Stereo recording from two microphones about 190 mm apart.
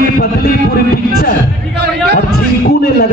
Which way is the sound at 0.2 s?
50° left (ahead or behind).